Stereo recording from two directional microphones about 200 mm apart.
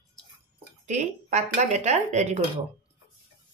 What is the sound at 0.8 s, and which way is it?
Speech, 35° right (ahead or behind).